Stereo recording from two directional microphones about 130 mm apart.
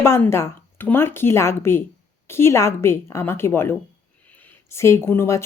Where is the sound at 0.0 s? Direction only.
20° left (ahead or behind).